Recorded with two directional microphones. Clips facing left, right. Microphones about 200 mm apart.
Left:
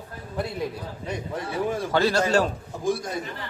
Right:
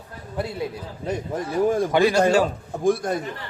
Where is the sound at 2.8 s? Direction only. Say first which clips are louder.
Right 5 dB; 55° right (ahead or behind).